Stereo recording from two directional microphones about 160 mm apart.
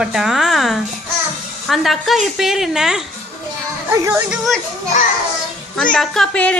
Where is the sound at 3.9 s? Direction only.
15° right (ahead or behind).